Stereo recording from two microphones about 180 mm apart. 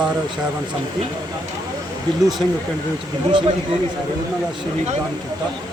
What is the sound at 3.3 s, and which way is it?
Speech, 25° right (ahead or behind).